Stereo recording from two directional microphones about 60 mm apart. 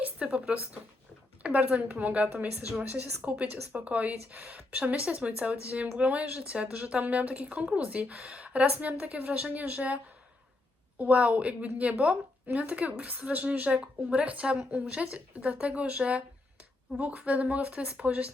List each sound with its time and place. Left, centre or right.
0.0 s a woman's voice: right
13.7 s a woman's voice: centre